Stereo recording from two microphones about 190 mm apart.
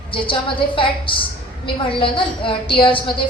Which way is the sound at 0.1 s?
25° left (ahead or behind).